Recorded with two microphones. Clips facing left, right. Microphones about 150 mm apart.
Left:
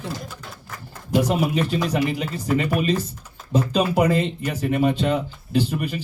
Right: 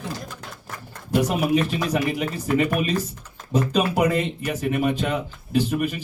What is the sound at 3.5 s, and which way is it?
Speech, 35° left (ahead or behind).